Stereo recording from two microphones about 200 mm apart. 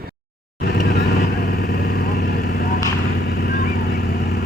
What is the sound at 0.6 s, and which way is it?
Vehicle, 55° left (ahead or behind).